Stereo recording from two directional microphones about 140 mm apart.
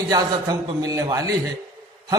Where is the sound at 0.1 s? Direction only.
25° right (ahead or behind).